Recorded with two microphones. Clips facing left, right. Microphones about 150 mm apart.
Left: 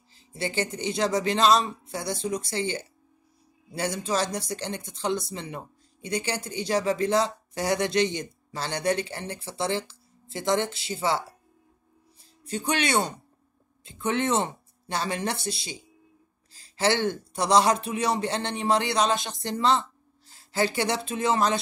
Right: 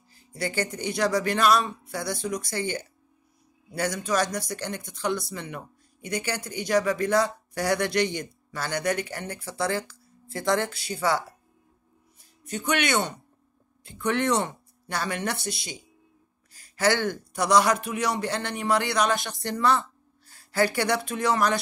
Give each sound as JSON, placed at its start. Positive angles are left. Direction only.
{"t": 0.1, "sound": "speech", "side_deg": 25}
{"t": 12.4, "sound": "a woman's voice", "side_deg": 30}